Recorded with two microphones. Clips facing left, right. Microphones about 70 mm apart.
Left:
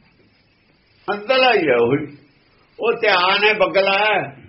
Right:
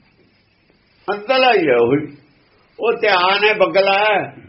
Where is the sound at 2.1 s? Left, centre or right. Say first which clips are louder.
Right 2 dB; right.